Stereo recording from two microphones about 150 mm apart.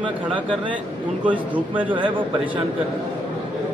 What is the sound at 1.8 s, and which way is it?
Speech, 35° right (ahead or behind).